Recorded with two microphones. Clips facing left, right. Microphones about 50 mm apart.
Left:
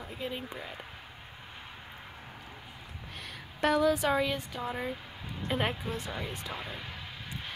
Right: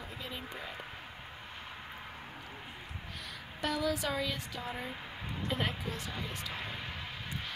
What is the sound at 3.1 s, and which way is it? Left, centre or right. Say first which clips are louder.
A woman's voice: left 3 dB; left.